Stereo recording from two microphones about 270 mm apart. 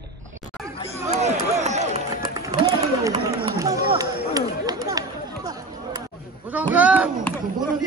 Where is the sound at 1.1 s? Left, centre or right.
Right.